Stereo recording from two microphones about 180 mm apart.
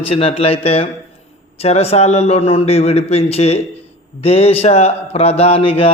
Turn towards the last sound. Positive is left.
turn(degrees=30)  # may be behind; listen again after turning